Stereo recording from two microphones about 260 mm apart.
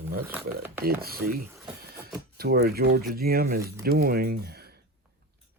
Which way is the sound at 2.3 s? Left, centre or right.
Right.